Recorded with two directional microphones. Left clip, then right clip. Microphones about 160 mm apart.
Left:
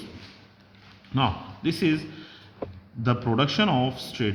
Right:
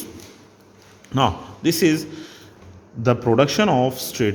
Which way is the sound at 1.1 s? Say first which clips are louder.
Right 6 dB; 45° right (ahead or behind).